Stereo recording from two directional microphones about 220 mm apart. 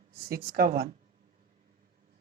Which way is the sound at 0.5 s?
45° right (ahead or behind).